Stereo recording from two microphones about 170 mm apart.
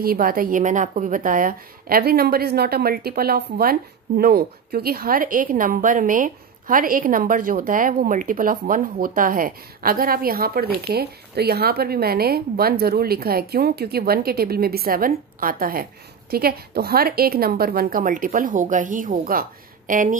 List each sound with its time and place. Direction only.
0.0 s a woman's voice: 60° right (ahead or behind)